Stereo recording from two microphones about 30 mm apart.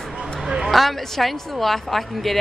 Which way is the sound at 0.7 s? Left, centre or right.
Centre.